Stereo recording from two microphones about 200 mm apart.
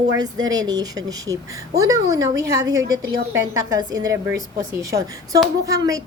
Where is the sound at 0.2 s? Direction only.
20° right (ahead or behind).